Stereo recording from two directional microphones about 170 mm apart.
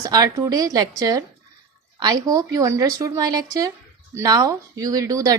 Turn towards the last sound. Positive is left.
turn(degrees=-20)  # may be behind; listen again after turning